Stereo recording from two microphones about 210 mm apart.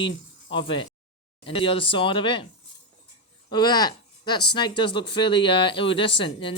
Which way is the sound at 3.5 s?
20° left (ahead or behind).